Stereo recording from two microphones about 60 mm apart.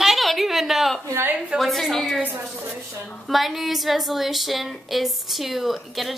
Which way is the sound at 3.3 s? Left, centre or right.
Centre.